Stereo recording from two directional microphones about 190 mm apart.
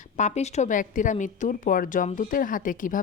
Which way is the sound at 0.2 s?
35° left (ahead or behind).